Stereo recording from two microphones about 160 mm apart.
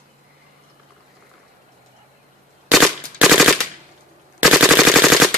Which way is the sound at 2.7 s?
Centre (ahead or behind).